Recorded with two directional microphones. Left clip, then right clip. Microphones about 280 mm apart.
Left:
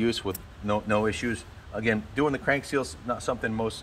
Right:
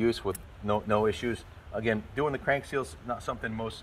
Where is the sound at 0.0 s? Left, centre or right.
Right.